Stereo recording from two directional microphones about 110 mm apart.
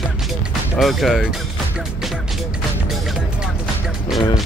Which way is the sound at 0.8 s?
Centre (ahead or behind).